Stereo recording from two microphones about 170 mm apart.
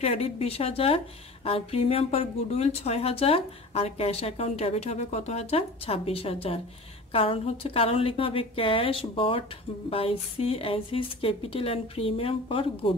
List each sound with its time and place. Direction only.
0.0 s speech: 35° left (ahead or behind)